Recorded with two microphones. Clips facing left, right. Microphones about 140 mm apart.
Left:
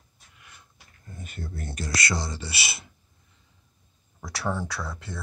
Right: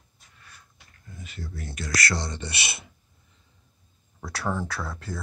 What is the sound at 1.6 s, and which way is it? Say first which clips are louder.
Speech: left 1 dB; 45° left (ahead or behind).